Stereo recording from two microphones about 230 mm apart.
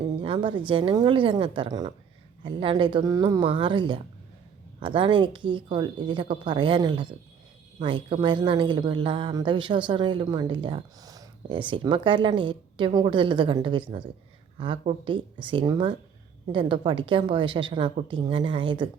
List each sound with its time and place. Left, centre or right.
0.2 s a woman's voice: right